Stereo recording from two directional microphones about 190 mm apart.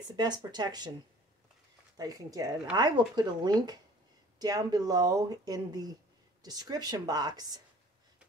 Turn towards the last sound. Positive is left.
turn(degrees=-20)  # may be behind; listen again after turning